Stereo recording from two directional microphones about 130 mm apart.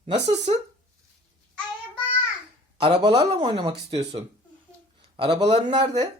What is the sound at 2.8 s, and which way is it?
Speech, 35° right (ahead or behind).